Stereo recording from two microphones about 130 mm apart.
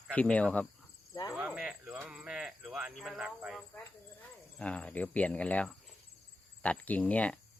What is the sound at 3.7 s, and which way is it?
Cricket, 10° left (ahead or behind).